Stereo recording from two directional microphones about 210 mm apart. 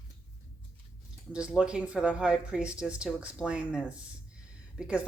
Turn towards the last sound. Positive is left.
turn(degrees=-5)  # may be behind; listen again after turning